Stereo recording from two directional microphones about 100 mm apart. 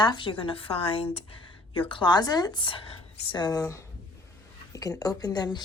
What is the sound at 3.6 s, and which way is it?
A woman's voice, 30° left (ahead or behind).